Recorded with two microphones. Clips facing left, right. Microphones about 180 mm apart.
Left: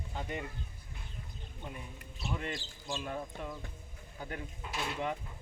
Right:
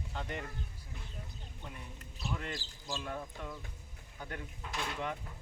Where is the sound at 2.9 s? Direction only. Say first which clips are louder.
Left 2 dB; 15° left (ahead or behind).